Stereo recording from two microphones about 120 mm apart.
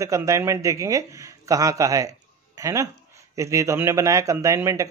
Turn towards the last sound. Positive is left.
turn(degrees=-25)  # may be behind; listen again after turning